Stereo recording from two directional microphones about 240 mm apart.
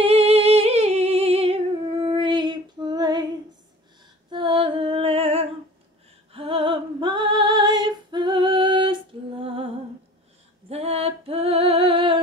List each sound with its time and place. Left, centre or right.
0.0 s humming: right
4.3 s music: right
6.3 s female singing: right
10.7 s female singing: right